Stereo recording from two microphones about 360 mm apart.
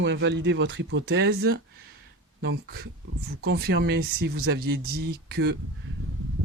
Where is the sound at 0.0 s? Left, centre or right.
Right.